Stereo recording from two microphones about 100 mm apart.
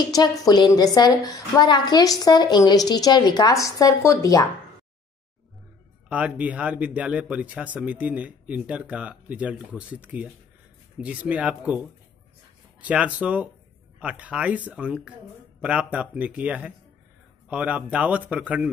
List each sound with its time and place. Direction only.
0.0 s a woman's voice: 40° left (ahead or behind)
3.5 s speech: 35° left (ahead or behind)
6.0 s speech: 15° right (ahead or behind)
12.8 s speech: 15° right (ahead or behind)